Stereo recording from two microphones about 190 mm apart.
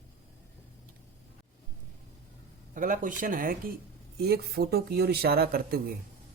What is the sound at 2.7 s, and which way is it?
Speech, 45° right (ahead or behind).